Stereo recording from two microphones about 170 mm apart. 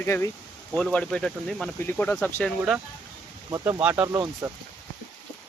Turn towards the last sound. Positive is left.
turn(degrees=-15)  # may be behind; listen again after turning